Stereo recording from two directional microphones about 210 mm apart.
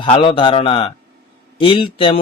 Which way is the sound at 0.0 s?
25° left (ahead or behind).